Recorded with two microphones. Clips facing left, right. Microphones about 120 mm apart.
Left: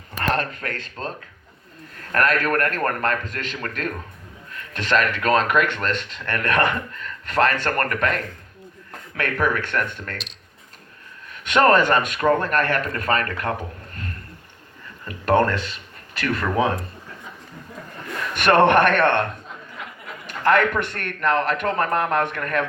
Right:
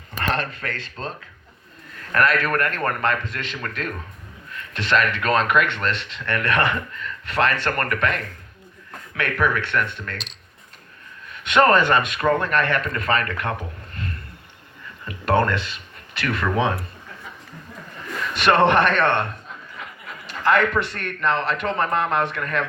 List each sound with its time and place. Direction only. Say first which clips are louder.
0.2 s speech: left 1 dB; 45° left (ahead or behind)
2.1 s speech: even; 45° left (ahead or behind)
11.3 s speech: even; 40° left (ahead or behind)
15.0 s speech: left 1 dB; 40° left (ahead or behind)
18.3 s speech: left 1 dB; 50° left (ahead or behind)
20.2 s speech: left 1 dB; 50° left (ahead or behind)